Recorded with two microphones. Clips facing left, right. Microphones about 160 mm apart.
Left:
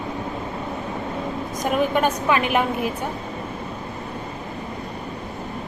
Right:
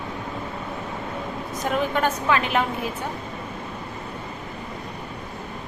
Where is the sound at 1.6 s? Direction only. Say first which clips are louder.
Left 3 dB; 15° left (ahead or behind).